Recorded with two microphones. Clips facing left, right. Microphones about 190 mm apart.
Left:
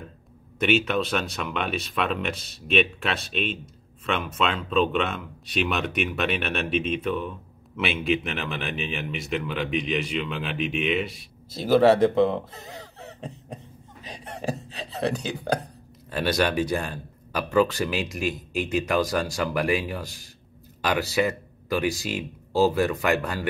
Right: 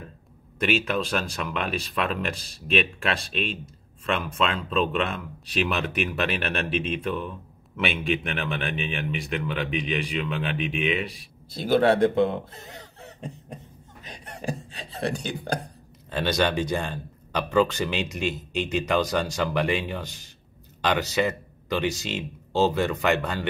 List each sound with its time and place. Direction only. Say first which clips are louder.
0.6 s speech: left 2 dB; centre (ahead or behind)
16.1 s speech: even; 5° left (ahead or behind)